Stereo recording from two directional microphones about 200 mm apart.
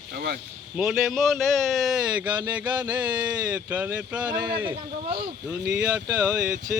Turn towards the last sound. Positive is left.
turn(degrees=-5)  # may be behind; listen again after turning